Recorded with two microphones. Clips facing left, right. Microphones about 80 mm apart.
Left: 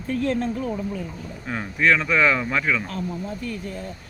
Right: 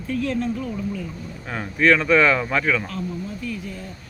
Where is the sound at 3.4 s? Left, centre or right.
Left.